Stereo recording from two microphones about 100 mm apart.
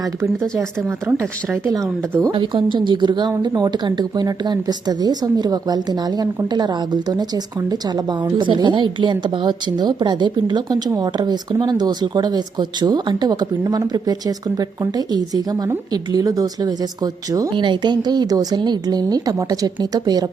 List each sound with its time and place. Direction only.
0.9 s speech: 25° right (ahead or behind)
2.3 s a woman's voice: 50° right (ahead or behind)
17.5 s a woman's voice: 50° right (ahead or behind)